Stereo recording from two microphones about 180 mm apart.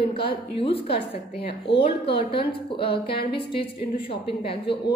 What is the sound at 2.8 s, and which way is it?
Speech, 60° left (ahead or behind).